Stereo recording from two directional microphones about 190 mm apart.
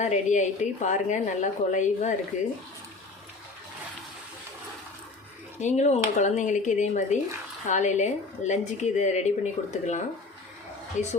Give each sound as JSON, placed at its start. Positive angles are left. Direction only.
{"t": 0.0, "sound": "speech", "side_deg": 40}
{"t": 5.5, "sound": "speech", "side_deg": 40}